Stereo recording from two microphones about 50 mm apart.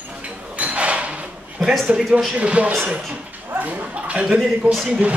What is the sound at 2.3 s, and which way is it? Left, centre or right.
Speech, right.